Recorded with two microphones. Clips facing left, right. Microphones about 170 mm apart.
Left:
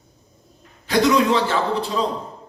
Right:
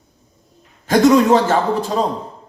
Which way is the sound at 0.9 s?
45° right (ahead or behind).